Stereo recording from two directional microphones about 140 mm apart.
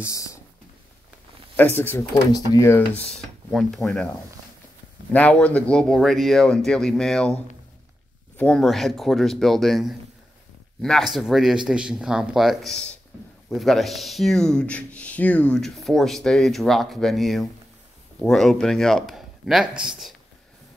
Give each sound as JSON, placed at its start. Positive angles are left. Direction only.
{"t": 0.0, "sound": "speech", "side_deg": 20}
{"t": 1.6, "sound": "speech", "side_deg": 15}
{"t": 2.3, "sound": "speech", "side_deg": 25}
{"t": 3.1, "sound": "speech", "side_deg": 0}
{"t": 8.4, "sound": "speech", "side_deg": 5}